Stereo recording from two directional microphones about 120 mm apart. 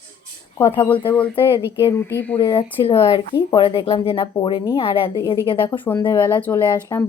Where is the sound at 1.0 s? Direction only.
10° left (ahead or behind).